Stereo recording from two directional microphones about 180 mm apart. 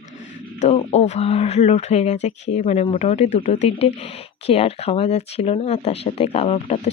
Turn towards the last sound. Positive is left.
turn(degrees=35)  # may be behind; listen again after turning